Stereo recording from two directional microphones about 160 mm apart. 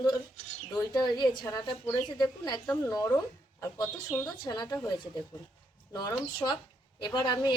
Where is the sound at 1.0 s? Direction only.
25° left (ahead or behind).